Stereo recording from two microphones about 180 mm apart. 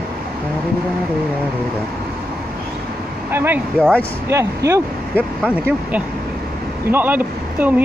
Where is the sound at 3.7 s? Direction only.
5° left (ahead or behind).